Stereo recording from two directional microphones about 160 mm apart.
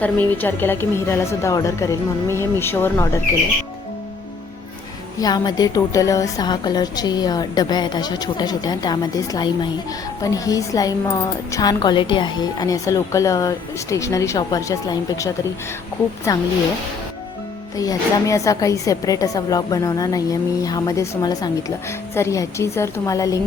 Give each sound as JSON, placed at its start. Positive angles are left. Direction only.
{"t": 0.0, "sound": "a woman's voice", "side_deg": 10}
{"t": 5.2, "sound": "a woman's voice", "side_deg": 25}
{"t": 17.7, "sound": "a woman's voice", "side_deg": 20}